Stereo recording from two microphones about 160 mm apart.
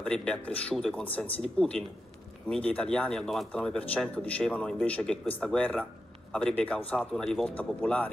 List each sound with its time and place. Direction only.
0.0 s speech: 5° left (ahead or behind)